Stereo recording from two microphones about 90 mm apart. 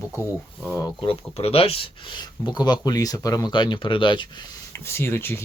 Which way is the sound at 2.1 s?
55° left (ahead or behind).